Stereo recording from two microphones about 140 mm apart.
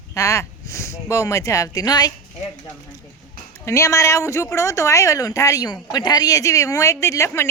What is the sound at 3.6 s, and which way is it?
A woman's voice, 20° left (ahead or behind).